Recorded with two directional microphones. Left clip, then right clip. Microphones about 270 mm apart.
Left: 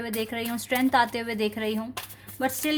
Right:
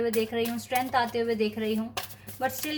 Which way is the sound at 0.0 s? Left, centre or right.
Left.